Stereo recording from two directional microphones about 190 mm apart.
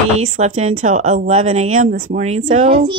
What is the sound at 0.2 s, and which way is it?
A woman's voice, 35° right (ahead or behind).